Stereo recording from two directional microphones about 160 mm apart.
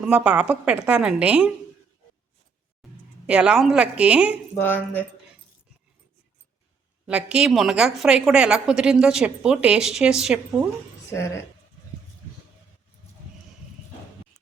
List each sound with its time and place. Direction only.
0.0 s a woman's voice: 10° right (ahead or behind)
3.2 s a woman's voice: 5° right (ahead or behind)
4.5 s speech: 10° left (ahead or behind)
7.1 s a woman's voice: 5° right (ahead or behind)